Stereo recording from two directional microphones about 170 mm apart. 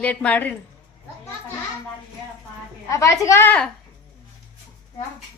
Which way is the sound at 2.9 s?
20° left (ahead or behind).